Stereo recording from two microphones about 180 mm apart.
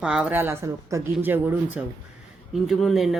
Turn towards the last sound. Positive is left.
turn(degrees=0)  # may be behind; listen again after turning